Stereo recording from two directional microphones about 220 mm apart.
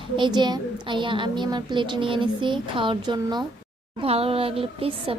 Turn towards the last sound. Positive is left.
turn(degrees=-25)  # may be behind; listen again after turning